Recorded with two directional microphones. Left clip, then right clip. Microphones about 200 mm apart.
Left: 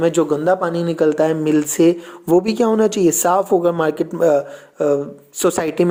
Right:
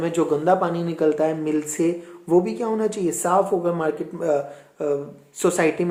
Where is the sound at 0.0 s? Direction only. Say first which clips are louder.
Left 5 dB; 35° left (ahead or behind).